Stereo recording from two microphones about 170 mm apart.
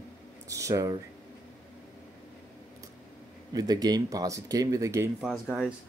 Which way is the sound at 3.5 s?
20° right (ahead or behind).